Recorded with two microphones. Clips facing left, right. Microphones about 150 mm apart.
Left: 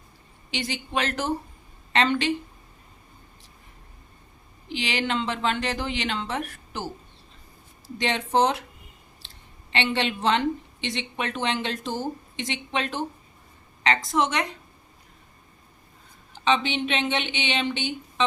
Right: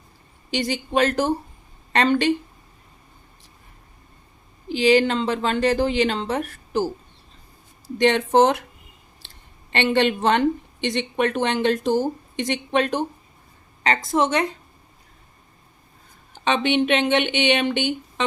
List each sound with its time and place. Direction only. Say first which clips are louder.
0.5 s a woman's voice: right 6 dB; 40° right (ahead or behind)
1.9 s a woman's voice: right 4 dB; 45° right (ahead or behind)
4.7 s a woman's voice: right 10 dB; 40° right (ahead or behind)
7.9 s a woman's voice: right 7 dB; 55° right (ahead or behind)
9.7 s a woman's voice: right 6 dB; 50° right (ahead or behind)
16.3 s a woman's voice: right 3 dB; 55° right (ahead or behind)